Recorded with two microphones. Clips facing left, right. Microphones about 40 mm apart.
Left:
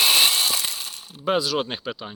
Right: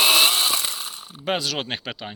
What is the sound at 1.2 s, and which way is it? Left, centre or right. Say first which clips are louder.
Speech: left 3 dB; right.